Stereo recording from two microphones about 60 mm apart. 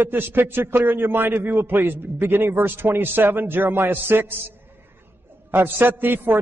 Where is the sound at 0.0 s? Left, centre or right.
Right.